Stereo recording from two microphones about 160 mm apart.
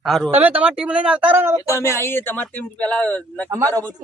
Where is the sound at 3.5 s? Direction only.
20° right (ahead or behind).